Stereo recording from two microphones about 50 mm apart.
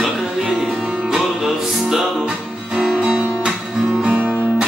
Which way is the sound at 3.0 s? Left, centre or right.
Centre.